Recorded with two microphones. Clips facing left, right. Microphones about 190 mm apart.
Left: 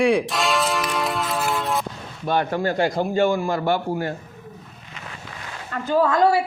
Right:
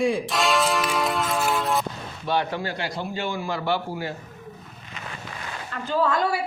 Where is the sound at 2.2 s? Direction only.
50° left (ahead or behind).